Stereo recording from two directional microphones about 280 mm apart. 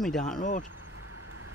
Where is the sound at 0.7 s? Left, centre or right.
Right.